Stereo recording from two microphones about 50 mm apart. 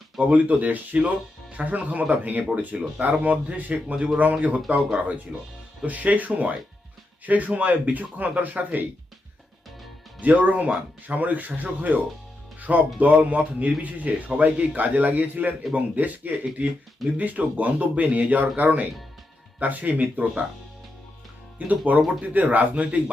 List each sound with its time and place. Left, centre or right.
0.2 s speech: right
10.2 s speech: right
21.7 s speech: right